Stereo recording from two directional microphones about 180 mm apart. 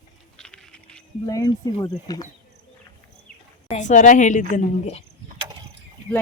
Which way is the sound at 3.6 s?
40° left (ahead or behind).